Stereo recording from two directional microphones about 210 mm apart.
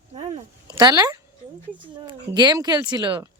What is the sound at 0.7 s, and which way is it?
A woman's voice, 20° right (ahead or behind).